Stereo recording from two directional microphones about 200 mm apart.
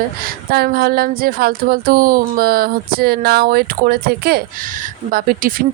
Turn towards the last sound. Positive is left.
turn(degrees=-45)  # may be behind; listen again after turning